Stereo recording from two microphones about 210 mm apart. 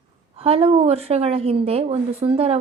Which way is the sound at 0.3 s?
30° right (ahead or behind).